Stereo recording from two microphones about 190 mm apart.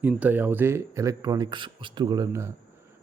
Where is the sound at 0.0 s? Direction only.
10° right (ahead or behind).